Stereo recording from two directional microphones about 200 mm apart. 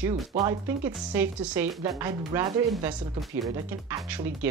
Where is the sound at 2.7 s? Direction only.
Centre (ahead or behind).